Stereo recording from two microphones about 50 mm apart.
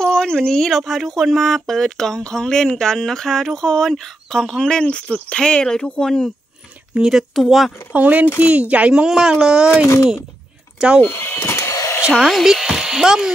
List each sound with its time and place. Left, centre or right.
0.0 s speech: centre
6.9 s speech: right
7.3 s speech: centre
7.9 s speech: right
9.0 s speech: centre
11.0 s speech: left
11.7 s a sound: left
12.3 s speech: centre